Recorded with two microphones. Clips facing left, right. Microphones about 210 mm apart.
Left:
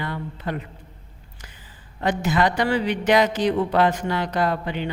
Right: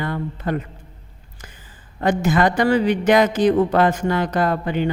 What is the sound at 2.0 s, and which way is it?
A woman's voice, 45° right (ahead or behind).